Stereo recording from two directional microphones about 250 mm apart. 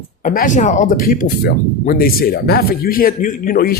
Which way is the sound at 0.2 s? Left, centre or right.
Left.